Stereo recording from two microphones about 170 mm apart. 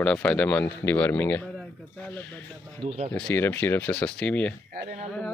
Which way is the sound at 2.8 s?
40° right (ahead or behind).